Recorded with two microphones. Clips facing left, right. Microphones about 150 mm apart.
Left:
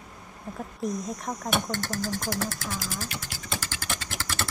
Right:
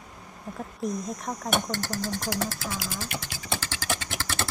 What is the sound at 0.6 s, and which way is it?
Speech, centre (ahead or behind).